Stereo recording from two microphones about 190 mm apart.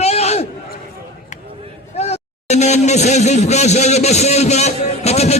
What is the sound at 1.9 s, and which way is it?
Speech, 35° left (ahead or behind).